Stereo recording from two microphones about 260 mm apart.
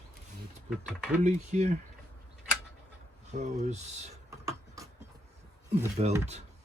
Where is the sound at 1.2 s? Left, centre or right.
Right.